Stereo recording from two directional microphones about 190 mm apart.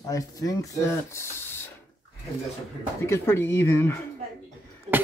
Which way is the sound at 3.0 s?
15° left (ahead or behind).